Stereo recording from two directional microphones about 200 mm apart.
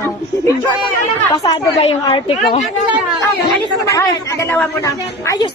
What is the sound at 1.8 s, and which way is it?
Speech, 30° left (ahead or behind).